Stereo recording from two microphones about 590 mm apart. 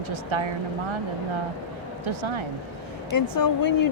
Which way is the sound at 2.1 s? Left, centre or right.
Right.